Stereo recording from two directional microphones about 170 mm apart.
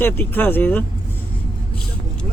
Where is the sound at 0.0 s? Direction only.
10° left (ahead or behind).